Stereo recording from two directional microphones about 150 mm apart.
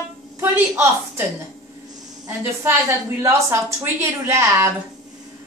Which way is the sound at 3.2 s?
15° right (ahead or behind).